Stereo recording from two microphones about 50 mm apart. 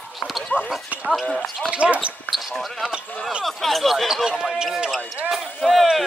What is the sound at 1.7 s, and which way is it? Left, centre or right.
Speech, right.